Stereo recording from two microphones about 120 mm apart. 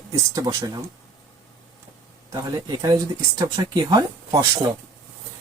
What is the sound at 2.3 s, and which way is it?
Speech, 30° right (ahead or behind).